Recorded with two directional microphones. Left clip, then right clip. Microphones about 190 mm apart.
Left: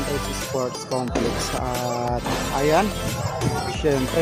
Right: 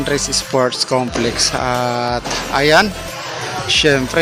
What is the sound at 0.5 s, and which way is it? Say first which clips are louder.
Speech: right 11 dB; 15° right (ahead or behind).